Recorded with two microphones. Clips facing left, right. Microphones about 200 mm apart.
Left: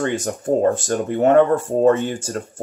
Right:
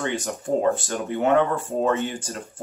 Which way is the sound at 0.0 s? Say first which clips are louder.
Left 5 dB; 45° left (ahead or behind).